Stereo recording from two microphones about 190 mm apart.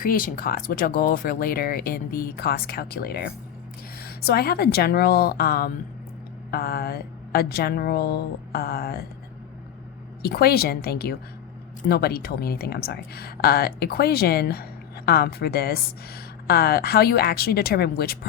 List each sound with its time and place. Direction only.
0.0 s speech: 50° left (ahead or behind)
10.2 s speech: 55° left (ahead or behind)